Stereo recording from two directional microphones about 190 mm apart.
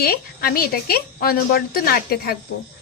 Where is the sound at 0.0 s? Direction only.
55° left (ahead or behind).